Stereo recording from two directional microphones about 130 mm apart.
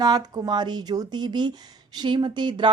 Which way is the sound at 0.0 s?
30° right (ahead or behind).